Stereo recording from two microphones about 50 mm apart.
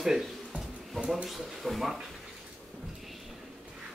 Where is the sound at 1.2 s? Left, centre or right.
Centre.